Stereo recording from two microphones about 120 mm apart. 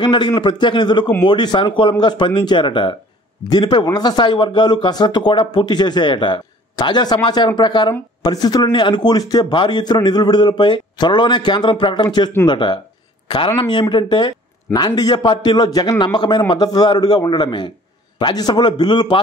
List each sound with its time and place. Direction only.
0.0 s a man's voice: 40° left (ahead or behind)